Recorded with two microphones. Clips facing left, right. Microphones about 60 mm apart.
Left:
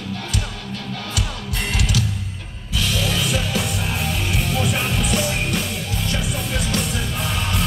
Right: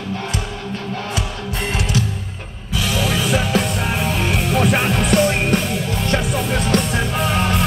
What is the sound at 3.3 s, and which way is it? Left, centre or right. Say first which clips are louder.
Music: right 5 dB; right.